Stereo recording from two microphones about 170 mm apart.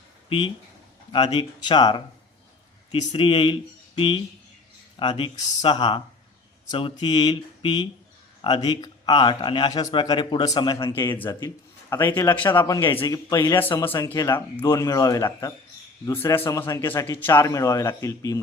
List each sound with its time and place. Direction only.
0.3 s a man's voice: 30° left (ahead or behind)